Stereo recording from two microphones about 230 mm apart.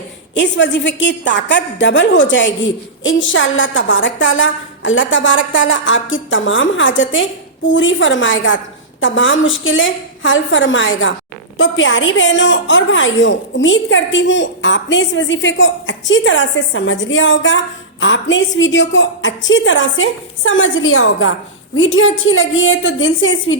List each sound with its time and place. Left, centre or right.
0.3 s a woman's voice: left